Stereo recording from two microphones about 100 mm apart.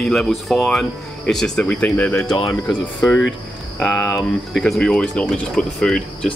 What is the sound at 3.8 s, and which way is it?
Speech, centre (ahead or behind).